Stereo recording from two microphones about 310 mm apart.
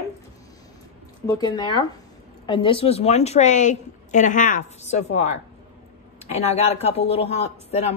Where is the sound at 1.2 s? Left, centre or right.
Centre.